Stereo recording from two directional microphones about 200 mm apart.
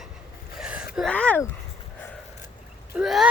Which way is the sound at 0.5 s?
5° right (ahead or behind).